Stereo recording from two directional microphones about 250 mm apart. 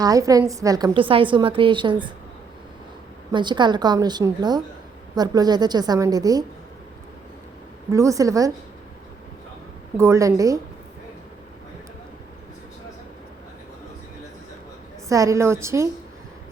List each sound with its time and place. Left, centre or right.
0.0 s a woman's voice: centre
3.3 s a woman's voice: centre
7.9 s a woman's voice: centre
10.0 s a woman's voice: centre
15.1 s a woman's voice: centre